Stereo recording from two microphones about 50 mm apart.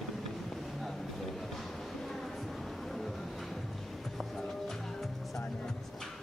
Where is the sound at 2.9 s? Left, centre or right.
Centre.